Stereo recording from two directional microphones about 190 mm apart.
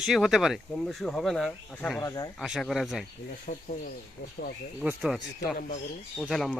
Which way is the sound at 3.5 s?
35° left (ahead or behind).